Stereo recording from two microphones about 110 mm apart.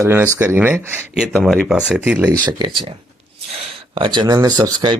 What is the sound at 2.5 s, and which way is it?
Speech, 45° right (ahead or behind).